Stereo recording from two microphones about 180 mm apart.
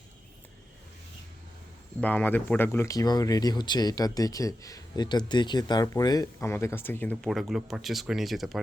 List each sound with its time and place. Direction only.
2.0 s speech: 10° left (ahead or behind)